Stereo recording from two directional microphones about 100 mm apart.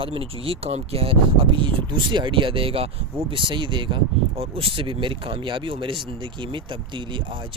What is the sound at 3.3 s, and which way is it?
Speech, 55° right (ahead or behind).